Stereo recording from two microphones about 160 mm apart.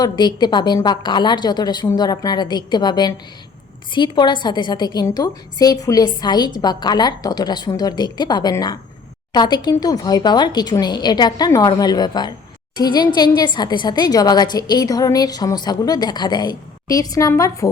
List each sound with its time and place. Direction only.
0.0 s a woman's voice: 25° left (ahead or behind)